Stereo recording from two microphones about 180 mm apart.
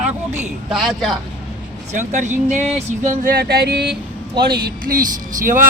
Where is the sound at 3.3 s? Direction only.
60° right (ahead or behind).